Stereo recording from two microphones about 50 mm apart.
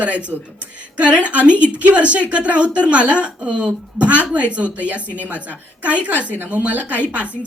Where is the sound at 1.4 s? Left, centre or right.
Left.